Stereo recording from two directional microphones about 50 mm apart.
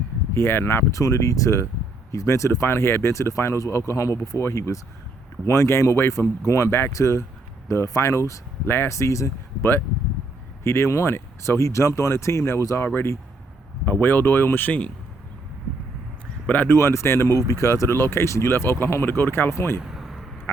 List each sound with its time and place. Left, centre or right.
0.3 s speech: left
0.9 s speech: left
2.1 s speech: left
6.7 s speech: left
6.9 s speech: left
8.6 s speech: left
8.9 s speech: left
13.8 s speech: left
16.6 s speech: left
19.5 s speech: left
19.8 s a sound: centre